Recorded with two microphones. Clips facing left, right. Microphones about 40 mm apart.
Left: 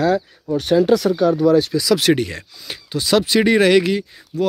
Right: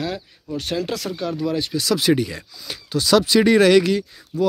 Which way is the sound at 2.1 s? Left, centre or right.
Left.